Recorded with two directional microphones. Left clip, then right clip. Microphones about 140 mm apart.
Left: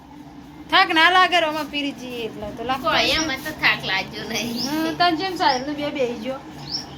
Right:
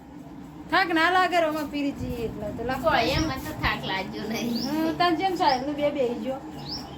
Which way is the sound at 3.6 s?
20° right (ahead or behind).